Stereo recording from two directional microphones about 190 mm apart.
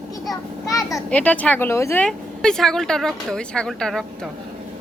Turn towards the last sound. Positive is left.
turn(degrees=5)  # may be behind; listen again after turning